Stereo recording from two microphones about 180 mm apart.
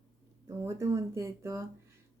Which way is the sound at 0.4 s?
15° right (ahead or behind).